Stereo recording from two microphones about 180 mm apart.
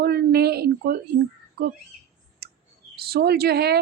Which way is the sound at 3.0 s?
60° right (ahead or behind).